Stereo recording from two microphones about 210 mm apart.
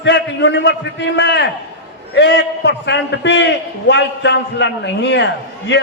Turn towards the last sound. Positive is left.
turn(degrees=55)  # may be behind; listen again after turning